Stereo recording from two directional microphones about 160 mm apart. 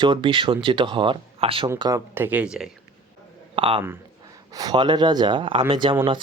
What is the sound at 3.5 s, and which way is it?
Speech, 35° right (ahead or behind).